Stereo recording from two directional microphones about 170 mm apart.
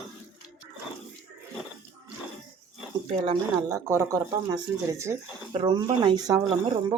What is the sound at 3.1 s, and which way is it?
Speech, 30° right (ahead or behind).